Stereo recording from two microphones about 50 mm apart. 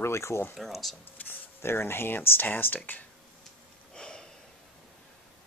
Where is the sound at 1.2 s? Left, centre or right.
Left.